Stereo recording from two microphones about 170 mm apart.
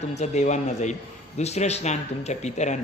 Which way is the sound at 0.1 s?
40° left (ahead or behind).